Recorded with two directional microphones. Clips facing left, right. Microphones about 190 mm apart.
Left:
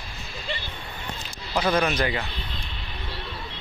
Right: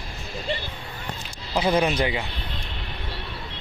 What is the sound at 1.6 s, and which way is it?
Speech, 20° right (ahead or behind).